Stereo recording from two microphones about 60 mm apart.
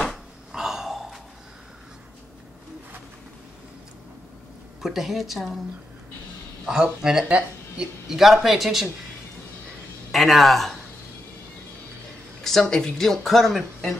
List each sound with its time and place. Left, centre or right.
0.5 s gasp: centre
4.8 s a woman's voice: centre
6.6 s speech: centre
7.2 s speech: right
8.1 s a woman's voice: centre
10.1 s speech: centre
12.4 s speech: centre